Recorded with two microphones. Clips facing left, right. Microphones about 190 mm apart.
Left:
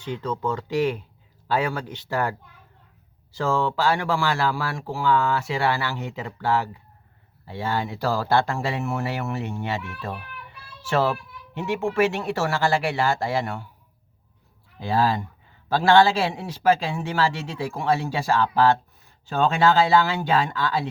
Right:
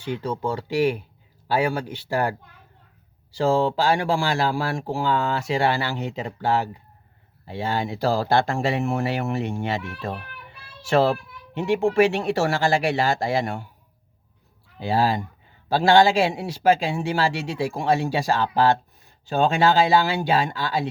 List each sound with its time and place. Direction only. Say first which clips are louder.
0.0 s speech: right 1 dB; 10° right (ahead or behind)
3.6 s speech: right 2 dB; 15° right (ahead or behind)
9.5 s speech: right 2 dB; 30° right (ahead or behind)
11.5 s speech: right 4 dB; 15° right (ahead or behind)
14.8 s speech: right 1 dB; 15° right (ahead or behind)